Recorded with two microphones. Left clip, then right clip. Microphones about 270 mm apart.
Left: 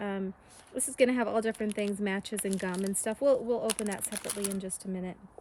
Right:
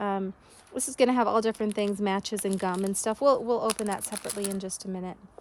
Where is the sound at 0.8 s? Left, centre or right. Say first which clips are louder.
Right 3 dB; right.